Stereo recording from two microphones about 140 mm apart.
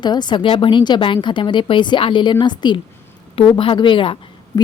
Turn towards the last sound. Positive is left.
turn(degrees=35)  # may be behind; listen again after turning